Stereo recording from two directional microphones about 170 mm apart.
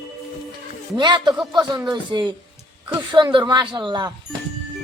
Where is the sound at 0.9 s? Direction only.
25° right (ahead or behind).